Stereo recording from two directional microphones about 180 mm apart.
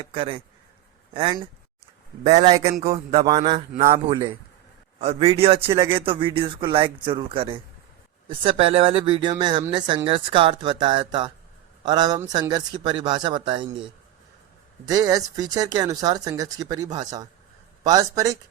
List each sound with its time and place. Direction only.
0.0 s a man's voice: 30° right (ahead or behind)
14.8 s speech: 20° right (ahead or behind)